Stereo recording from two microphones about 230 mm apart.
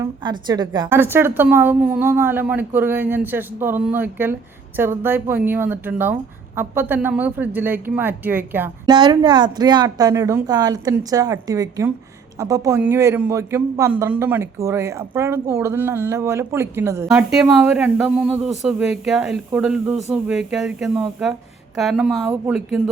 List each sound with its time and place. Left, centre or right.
0.0 s a man's voice: centre